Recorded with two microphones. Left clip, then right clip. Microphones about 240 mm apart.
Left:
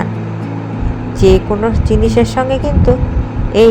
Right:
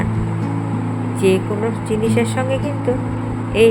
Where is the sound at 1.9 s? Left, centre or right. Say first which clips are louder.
Left 6 dB; centre.